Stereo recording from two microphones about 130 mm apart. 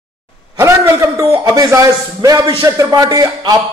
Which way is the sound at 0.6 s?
25° right (ahead or behind).